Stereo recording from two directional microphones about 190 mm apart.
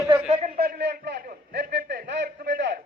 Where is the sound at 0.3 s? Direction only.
40° right (ahead or behind).